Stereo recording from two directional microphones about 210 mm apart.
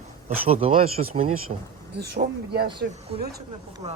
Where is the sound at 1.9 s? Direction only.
50° right (ahead or behind).